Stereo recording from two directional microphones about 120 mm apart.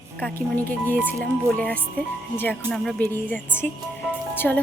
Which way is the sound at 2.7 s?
Centre (ahead or behind).